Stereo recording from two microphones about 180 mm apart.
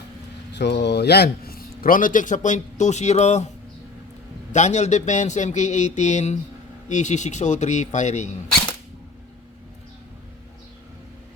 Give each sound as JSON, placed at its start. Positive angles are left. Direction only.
{"t": 0.5, "sound": "speech", "side_deg": 75}
{"t": 4.5, "sound": "speech", "side_deg": 40}